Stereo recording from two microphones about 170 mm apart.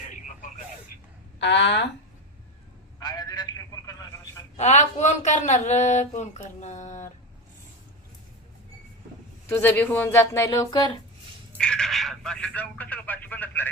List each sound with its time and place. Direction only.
0.1 s radio: 50° left (ahead or behind)
1.4 s speech: 90° left
3.0 s telephone: 25° left (ahead or behind)
4.5 s speech: 40° left (ahead or behind)
9.5 s speech: 10° left (ahead or behind)
11.5 s speech: 5° left (ahead or behind)